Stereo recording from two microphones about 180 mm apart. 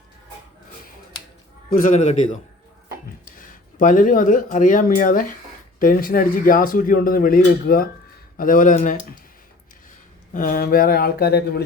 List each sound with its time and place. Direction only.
1.7 s speech: 50° left (ahead or behind)
10.3 s speech: 50° left (ahead or behind)